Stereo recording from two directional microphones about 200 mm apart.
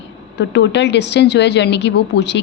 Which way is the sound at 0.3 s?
60° left (ahead or behind).